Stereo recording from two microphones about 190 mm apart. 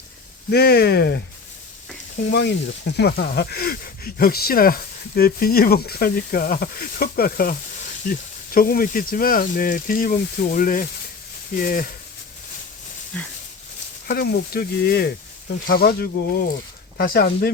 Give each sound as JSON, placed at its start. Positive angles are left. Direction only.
{"t": 0.5, "sound": "speech", "side_deg": 55}
{"t": 2.3, "sound": "speech", "side_deg": 60}
{"t": 14.1, "sound": "speech", "side_deg": 55}